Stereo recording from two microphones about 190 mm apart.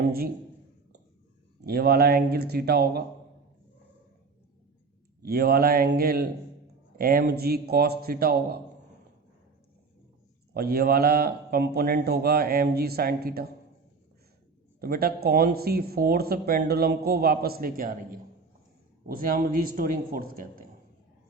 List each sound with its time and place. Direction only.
1.6 s a man's voice: 55° right (ahead or behind)
5.2 s a man's voice: 55° right (ahead or behind)
10.5 s a man's voice: 55° right (ahead or behind)
14.8 s speech: 50° right (ahead or behind)